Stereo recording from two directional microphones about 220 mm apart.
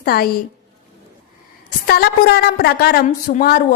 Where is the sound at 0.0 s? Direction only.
45° left (ahead or behind).